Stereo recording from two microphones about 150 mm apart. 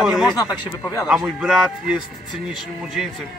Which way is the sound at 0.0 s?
Centre (ahead or behind).